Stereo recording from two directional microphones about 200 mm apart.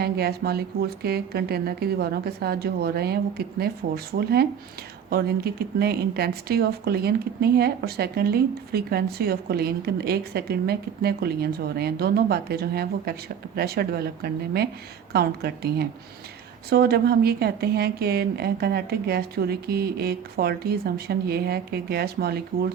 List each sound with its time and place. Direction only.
0.0 s speech: 50° right (ahead or behind)